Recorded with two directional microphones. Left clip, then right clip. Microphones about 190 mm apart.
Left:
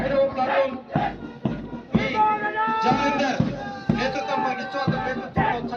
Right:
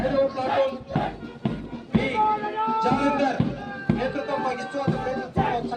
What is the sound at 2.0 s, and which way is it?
Music, 65° right (ahead or behind).